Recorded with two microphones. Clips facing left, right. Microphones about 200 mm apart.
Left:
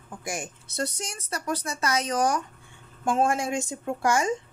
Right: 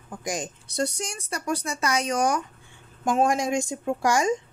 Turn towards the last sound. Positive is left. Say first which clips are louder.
# right 2 dB
turn(degrees=-15)  # may be behind; listen again after turning